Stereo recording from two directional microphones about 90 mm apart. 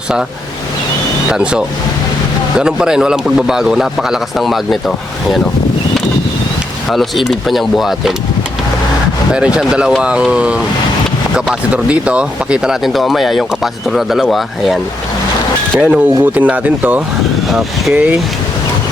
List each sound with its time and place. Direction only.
1.3 s a man's voice: 10° right (ahead or behind)
6.9 s speech: centre (ahead or behind)
9.6 s a man's voice: 10° right (ahead or behind)
15.8 s a man's voice: 15° right (ahead or behind)
17.5 s speech: centre (ahead or behind)
17.9 s a man's voice: 15° right (ahead or behind)